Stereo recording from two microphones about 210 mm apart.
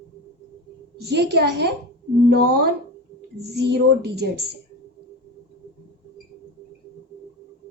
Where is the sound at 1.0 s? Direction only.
50° right (ahead or behind).